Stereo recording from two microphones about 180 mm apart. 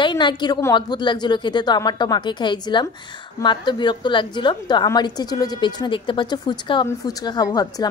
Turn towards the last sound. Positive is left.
turn(degrees=20)  # may be behind; listen again after turning